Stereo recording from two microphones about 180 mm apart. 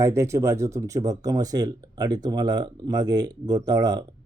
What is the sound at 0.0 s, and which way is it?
Speech, 15° right (ahead or behind).